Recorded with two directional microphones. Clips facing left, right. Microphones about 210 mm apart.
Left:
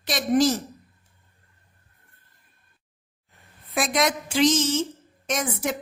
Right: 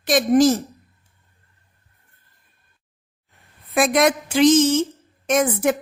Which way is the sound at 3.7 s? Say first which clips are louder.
Right 6 dB; 55° right (ahead or behind).